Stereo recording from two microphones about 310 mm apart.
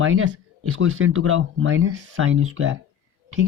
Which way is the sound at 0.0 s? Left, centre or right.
Right.